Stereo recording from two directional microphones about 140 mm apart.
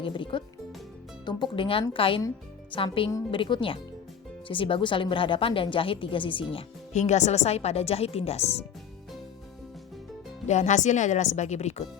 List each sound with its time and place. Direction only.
0.0 s a woman's voice: 35° left (ahead or behind)
6.9 s speech: 55° left (ahead or behind)
10.4 s speech: 55° left (ahead or behind)